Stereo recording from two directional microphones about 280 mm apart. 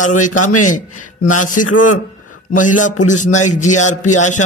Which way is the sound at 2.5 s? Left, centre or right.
Left.